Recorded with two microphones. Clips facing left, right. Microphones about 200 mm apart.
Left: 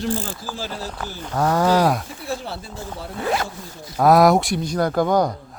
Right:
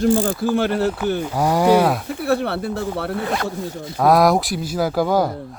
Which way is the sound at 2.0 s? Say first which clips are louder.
Right 9 dB; 65° right (ahead or behind).